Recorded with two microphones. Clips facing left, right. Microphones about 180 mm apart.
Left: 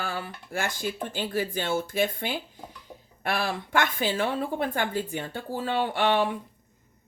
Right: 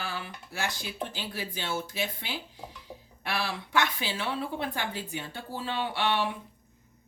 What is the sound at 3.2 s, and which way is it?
A woman's voice, 50° left (ahead or behind).